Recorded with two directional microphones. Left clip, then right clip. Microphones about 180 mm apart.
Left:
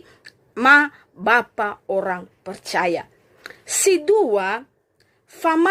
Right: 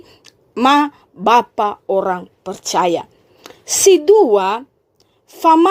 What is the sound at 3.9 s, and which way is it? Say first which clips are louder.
Speech: right 6 dB; 45° right (ahead or behind).